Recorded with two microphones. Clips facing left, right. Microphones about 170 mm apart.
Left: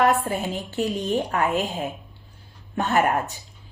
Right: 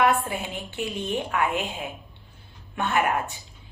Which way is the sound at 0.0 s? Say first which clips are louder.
Left 2 dB; 40° left (ahead or behind).